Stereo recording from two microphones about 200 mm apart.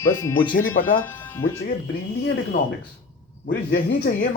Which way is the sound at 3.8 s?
50° left (ahead or behind).